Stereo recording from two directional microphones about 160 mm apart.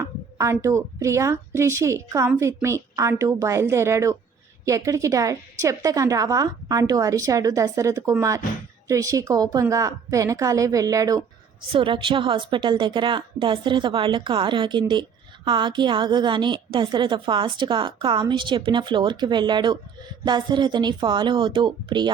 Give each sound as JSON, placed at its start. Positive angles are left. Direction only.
{"t": 0.0, "sound": "a woman's voice", "side_deg": -20}
{"t": 11.7, "sound": "a woman's voice", "side_deg": -35}